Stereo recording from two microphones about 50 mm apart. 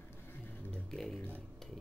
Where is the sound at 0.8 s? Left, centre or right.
Centre.